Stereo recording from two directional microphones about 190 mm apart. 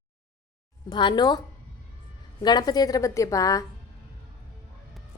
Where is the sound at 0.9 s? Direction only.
25° left (ahead or behind).